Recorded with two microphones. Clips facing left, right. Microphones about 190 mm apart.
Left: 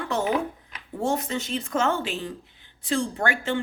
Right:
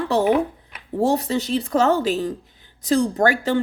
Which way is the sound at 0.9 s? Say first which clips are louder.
Right 6 dB; 35° right (ahead or behind).